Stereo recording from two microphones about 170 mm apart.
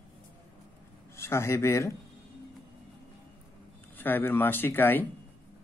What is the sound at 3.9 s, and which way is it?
A man's voice, 10° left (ahead or behind).